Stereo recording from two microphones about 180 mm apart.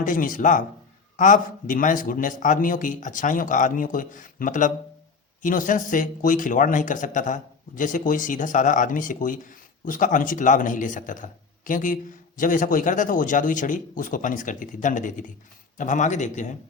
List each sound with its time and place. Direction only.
0.0 s speech: 50° left (ahead or behind)